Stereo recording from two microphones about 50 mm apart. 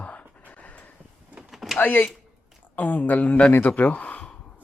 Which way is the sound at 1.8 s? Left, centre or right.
Left.